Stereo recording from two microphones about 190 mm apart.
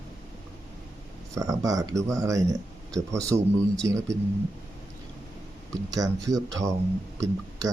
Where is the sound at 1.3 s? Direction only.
15° right (ahead or behind).